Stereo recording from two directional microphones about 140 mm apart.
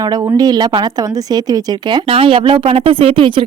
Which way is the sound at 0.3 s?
30° right (ahead or behind).